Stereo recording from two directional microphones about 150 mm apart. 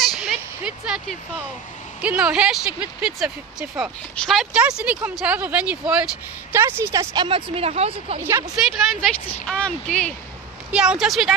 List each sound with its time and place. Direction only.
0.0 s a sound: 5° right (ahead or behind)
2.0 s speech: 10° right (ahead or behind)
6.8 s speech: 20° right (ahead or behind)
7.2 s a woman's voice: 35° right (ahead or behind)
8.2 s speech: 15° right (ahead or behind)
9.5 s speech: 5° left (ahead or behind)
10.7 s speech: 5° right (ahead or behind)